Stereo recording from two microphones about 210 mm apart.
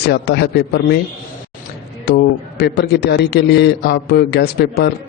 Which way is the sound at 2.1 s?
50° left (ahead or behind).